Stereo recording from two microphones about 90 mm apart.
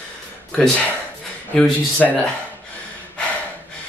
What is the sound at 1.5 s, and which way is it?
Speech, 10° left (ahead or behind).